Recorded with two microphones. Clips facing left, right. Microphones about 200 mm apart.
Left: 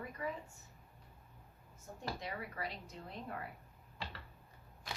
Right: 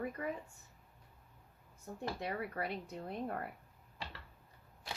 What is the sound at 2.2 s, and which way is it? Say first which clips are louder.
A woman's voice: right 4 dB; 60° right (ahead or behind).